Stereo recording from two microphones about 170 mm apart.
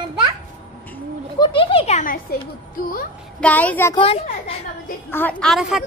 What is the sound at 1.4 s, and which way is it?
Speech, 30° left (ahead or behind).